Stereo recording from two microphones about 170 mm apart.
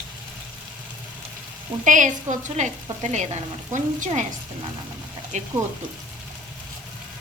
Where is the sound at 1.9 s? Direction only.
50° right (ahead or behind).